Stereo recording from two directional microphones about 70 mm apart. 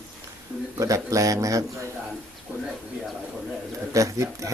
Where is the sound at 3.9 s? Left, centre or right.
Right.